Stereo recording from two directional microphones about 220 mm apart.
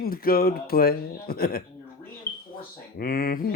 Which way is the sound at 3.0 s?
40° left (ahead or behind).